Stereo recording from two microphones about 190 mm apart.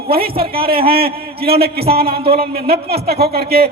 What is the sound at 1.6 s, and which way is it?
A man's voice, 55° right (ahead or behind).